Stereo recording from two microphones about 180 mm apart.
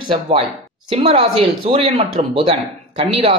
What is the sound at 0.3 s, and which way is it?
Speech, 35° right (ahead or behind).